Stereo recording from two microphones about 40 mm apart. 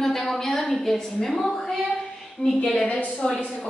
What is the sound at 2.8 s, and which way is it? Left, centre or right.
Speech, left.